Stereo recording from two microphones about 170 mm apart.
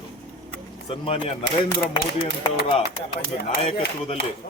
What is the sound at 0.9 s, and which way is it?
Speech, 35° left (ahead or behind).